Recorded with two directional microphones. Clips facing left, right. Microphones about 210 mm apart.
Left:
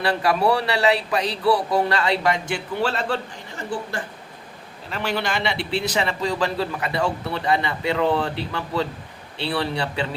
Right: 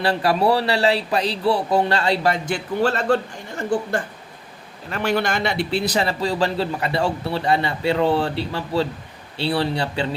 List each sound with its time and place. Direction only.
0.0 s a man's voice: 30° right (ahead or behind)
4.9 s a man's voice: 50° right (ahead or behind); by 10.1 s 30° right (ahead or behind)